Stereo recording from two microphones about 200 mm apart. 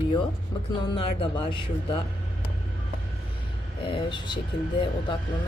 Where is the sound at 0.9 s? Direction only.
25° left (ahead or behind).